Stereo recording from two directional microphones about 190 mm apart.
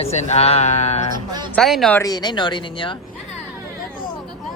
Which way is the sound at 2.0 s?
20° left (ahead or behind).